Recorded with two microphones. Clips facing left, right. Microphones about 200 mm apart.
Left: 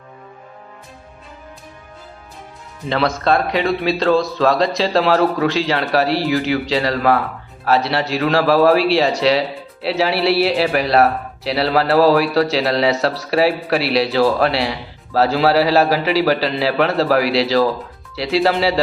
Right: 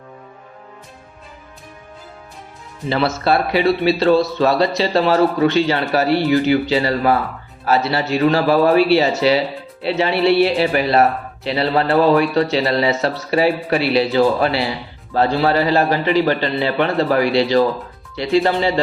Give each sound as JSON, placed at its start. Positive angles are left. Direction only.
{"t": 2.9, "sound": "speech", "side_deg": -5}